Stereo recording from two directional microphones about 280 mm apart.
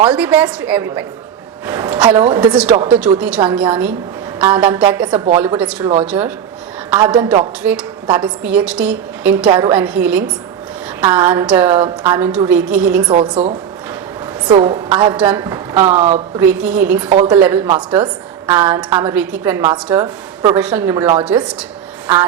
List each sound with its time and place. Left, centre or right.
0.2 s a woman's voice: centre
13.1 s a woman's voice: centre
14.4 s a woman's voice: centre
16.0 s a woman's voice: right
16.4 s a woman's voice: centre
17.1 s a woman's voice: centre
17.3 s a woman's voice: centre
22.0 s a sound: centre